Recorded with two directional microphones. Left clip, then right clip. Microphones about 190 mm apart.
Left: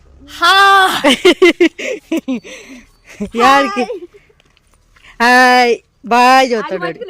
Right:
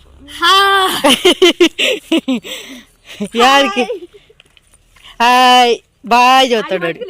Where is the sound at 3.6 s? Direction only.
60° left (ahead or behind).